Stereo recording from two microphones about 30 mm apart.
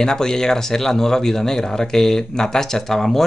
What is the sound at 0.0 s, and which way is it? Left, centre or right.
Speech, left.